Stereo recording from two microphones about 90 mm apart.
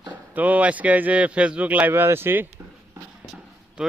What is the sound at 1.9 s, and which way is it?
Speech, 25° right (ahead or behind).